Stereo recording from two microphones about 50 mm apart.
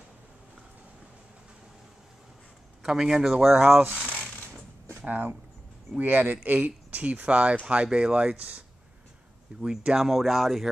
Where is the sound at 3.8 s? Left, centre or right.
Right.